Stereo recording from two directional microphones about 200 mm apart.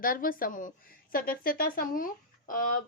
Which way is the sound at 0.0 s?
45° left (ahead or behind).